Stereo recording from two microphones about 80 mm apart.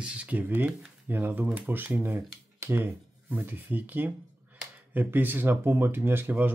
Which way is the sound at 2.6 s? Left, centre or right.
Right.